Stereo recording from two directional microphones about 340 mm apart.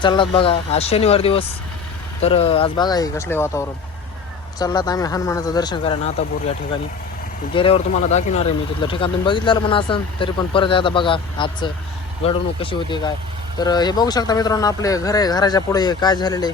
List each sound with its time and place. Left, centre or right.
0.0 s speech: centre
7.5 s speech: centre